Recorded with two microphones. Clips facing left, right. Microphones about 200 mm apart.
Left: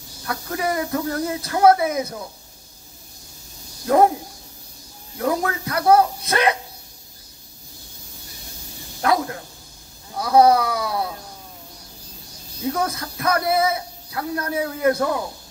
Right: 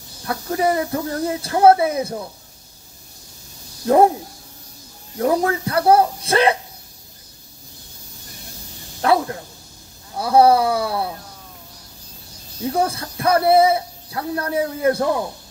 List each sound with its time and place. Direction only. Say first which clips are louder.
0.3 s speech: right 5 dB; 30° right (ahead or behind)
3.8 s speech: right 2 dB; 30° right (ahead or behind)
5.1 s speech: right 4 dB; 30° right (ahead or behind)
9.0 s speech: right 3 dB; 30° right (ahead or behind)
10.2 s speech: right 1 dB; 30° right (ahead or behind)
12.7 s speech: right 4 dB; 30° right (ahead or behind)